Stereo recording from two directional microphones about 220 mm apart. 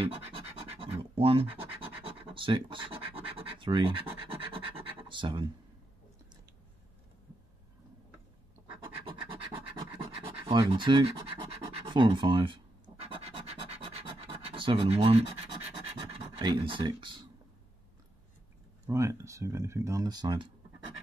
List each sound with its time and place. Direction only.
0.0 s scratch: 25° right (ahead or behind)
8.6 s scratch: 25° right (ahead or behind)
10.6 s speech: 20° right (ahead or behind)
13.0 s scratch: 30° right (ahead or behind)
18.9 s speech: 15° right (ahead or behind)